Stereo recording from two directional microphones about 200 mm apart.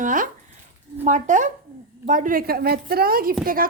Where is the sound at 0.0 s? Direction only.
40° right (ahead or behind).